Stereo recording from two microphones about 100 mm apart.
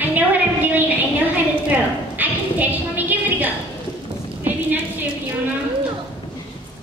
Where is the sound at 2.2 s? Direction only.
20° right (ahead or behind).